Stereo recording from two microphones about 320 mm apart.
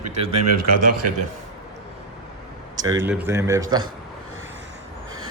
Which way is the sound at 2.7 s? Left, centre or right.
Centre.